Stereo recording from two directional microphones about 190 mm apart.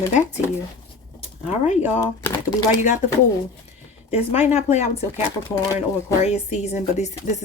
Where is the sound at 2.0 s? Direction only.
15° left (ahead or behind).